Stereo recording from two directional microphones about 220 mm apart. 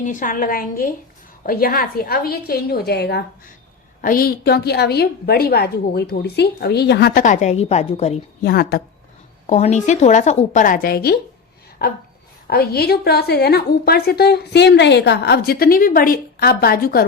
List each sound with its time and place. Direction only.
0.0 s a woman's voice: 35° left (ahead or behind)
8.4 s a woman's voice: 45° left (ahead or behind)
9.5 s a woman's voice: 30° left (ahead or behind)